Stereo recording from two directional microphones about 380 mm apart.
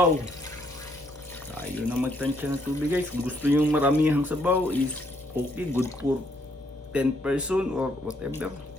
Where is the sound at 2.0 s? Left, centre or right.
Centre.